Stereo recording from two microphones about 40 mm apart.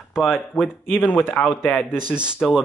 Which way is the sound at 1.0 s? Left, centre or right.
Left.